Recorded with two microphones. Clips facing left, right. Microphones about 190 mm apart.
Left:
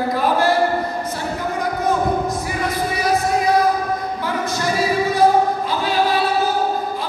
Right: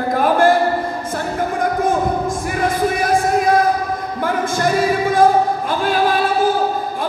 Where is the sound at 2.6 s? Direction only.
50° right (ahead or behind).